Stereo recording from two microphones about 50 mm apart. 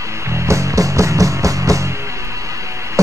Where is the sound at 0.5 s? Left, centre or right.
Right.